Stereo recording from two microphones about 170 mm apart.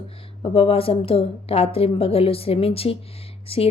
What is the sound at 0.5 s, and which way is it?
A woman's voice, 35° left (ahead or behind).